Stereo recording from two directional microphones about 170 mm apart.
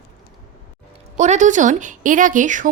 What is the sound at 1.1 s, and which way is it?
A woman's voice, 45° right (ahead or behind).